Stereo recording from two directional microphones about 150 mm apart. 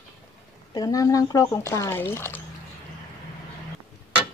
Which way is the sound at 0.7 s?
25° left (ahead or behind).